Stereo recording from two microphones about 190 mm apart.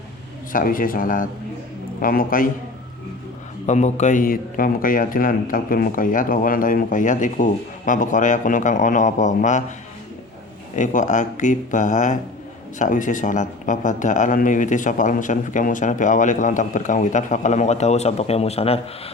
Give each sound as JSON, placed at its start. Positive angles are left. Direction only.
{"t": 0.5, "sound": "a man's voice", "side_deg": 45}
{"t": 3.7, "sound": "a man's voice", "side_deg": 35}
{"t": 10.8, "sound": "speech", "side_deg": 40}